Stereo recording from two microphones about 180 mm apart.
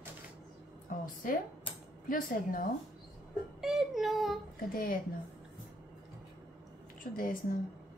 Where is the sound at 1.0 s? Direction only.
50° left (ahead or behind).